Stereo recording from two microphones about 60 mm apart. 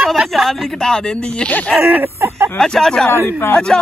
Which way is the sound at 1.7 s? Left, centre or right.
Centre.